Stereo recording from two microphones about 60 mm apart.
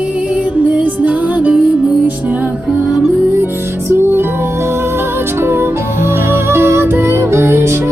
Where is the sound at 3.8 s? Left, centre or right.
Right.